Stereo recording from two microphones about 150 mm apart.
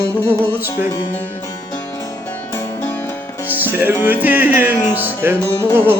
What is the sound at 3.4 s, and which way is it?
Music, 10° right (ahead or behind).